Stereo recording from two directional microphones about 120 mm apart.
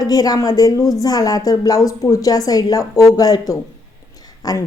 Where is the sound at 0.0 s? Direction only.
35° left (ahead or behind).